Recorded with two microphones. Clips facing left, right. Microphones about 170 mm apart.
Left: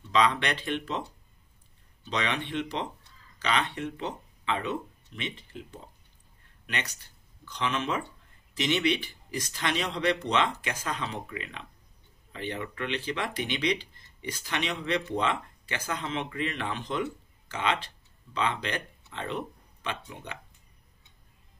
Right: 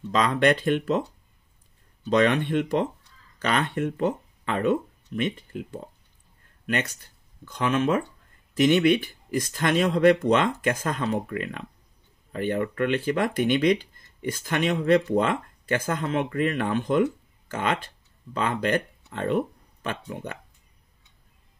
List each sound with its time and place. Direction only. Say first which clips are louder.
0.1 s speech: right 5 dB; 45° right (ahead or behind)
2.0 s speech: right 10 dB; 50° right (ahead or behind)